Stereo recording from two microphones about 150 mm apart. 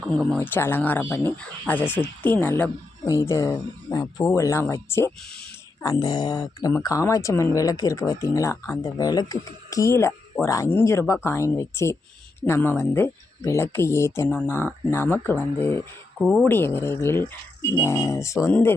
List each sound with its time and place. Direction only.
0.3 s speech: 15° left (ahead or behind)
16.2 s speech: centre (ahead or behind)
16.5 s speech: 15° left (ahead or behind)